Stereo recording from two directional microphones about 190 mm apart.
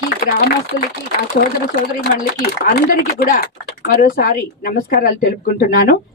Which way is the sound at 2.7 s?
50° left (ahead or behind).